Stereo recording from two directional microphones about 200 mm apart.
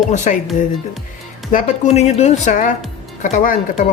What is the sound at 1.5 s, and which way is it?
Speech, 35° left (ahead or behind).